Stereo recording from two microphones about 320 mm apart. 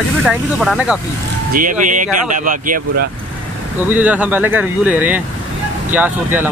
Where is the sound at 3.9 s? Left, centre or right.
Centre.